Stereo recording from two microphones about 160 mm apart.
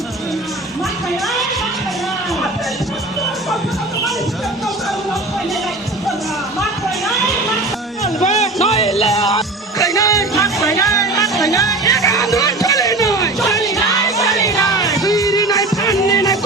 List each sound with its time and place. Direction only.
8.0 s a sound: 45° left (ahead or behind)
8.6 s music: 40° left (ahead or behind)
9.7 s music: 20° left (ahead or behind)